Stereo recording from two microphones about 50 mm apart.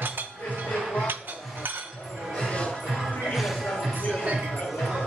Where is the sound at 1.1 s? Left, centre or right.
Right.